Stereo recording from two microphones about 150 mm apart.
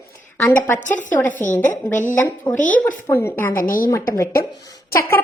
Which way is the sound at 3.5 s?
70° left (ahead or behind).